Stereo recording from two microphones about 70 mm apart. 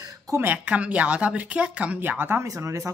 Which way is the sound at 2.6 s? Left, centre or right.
Right.